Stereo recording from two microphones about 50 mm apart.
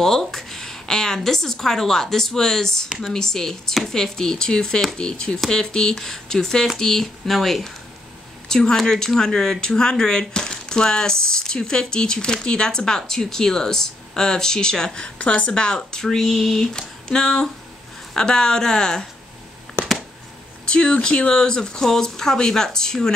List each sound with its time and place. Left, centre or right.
0.0 s speech: centre
15.1 s speech: left
15.5 s speech: centre
20.6 s speech: centre